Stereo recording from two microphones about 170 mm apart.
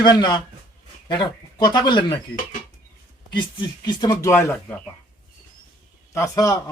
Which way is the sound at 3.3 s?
25° left (ahead or behind).